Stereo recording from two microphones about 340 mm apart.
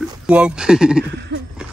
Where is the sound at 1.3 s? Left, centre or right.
Right.